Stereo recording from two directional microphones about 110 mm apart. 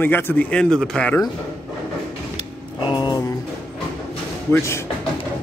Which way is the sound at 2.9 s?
45° left (ahead or behind).